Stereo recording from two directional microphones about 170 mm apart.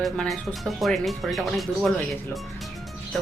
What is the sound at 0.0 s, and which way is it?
Speech, centre (ahead or behind).